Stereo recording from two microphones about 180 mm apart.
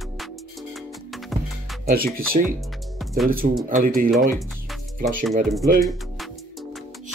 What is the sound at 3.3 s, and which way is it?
Speech, 55° right (ahead or behind).